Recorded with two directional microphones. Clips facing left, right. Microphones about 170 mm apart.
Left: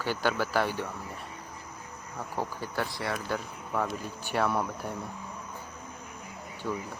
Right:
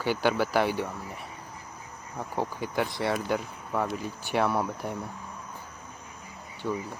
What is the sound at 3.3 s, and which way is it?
Speech, 10° right (ahead or behind).